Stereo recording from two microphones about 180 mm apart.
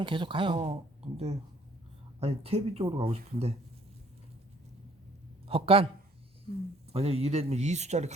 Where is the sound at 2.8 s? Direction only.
20° right (ahead or behind).